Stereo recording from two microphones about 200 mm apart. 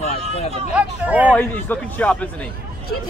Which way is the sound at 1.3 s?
10° left (ahead or behind).